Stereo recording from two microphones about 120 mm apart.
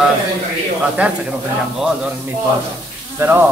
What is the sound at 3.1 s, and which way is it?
Speech, 20° right (ahead or behind).